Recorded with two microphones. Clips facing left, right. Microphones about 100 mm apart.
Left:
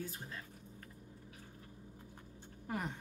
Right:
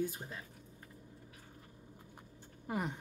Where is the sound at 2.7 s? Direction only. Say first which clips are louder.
Right 3 dB; 10° right (ahead or behind).